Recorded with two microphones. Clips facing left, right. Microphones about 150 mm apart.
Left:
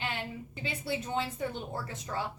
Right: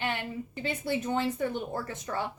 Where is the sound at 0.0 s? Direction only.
55° right (ahead or behind).